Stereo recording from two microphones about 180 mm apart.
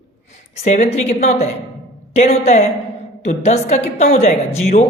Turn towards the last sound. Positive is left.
turn(degrees=35)  # may be behind; listen again after turning